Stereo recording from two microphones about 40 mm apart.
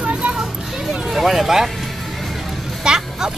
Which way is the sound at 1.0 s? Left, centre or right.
Centre.